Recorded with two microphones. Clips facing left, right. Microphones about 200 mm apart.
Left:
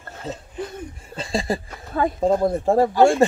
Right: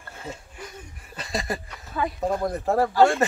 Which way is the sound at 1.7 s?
50° left (ahead or behind).